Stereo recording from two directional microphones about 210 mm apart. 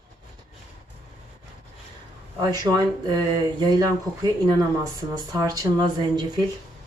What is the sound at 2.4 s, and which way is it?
Speech, 20° right (ahead or behind).